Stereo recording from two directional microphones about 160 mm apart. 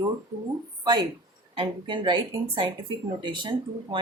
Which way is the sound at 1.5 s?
30° right (ahead or behind).